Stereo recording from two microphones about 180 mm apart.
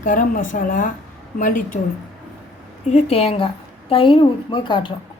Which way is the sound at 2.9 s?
35° left (ahead or behind).